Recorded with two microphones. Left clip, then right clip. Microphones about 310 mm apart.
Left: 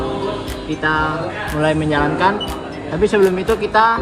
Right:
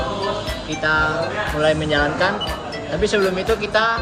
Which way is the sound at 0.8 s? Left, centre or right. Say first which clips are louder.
Left 1 dB; centre.